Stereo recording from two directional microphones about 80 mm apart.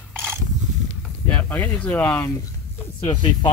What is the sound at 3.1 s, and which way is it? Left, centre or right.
Speech, left.